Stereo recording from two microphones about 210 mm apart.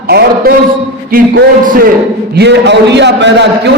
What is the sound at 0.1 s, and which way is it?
Speech, 50° right (ahead or behind).